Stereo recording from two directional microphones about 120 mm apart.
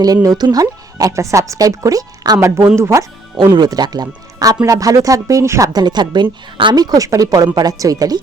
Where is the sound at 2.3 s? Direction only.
20° right (ahead or behind).